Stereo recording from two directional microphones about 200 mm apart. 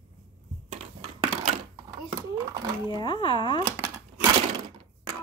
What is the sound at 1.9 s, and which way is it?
Speech, 15° right (ahead or behind).